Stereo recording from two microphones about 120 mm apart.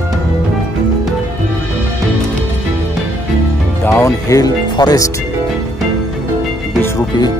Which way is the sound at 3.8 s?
25° left (ahead or behind).